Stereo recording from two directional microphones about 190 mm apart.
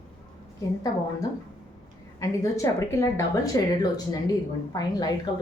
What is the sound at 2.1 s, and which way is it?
Speech, 15° left (ahead or behind).